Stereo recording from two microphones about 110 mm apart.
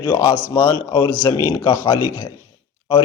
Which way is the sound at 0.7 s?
35° left (ahead or behind).